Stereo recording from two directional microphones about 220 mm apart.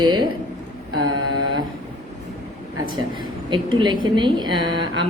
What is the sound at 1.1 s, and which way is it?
Mantra, 65° right (ahead or behind).